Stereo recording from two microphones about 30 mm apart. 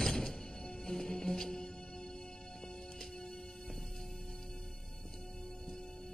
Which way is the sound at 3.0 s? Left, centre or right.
Centre.